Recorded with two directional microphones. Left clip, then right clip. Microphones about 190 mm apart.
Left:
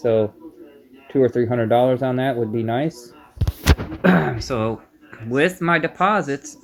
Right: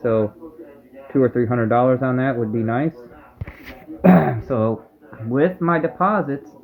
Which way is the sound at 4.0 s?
5° left (ahead or behind).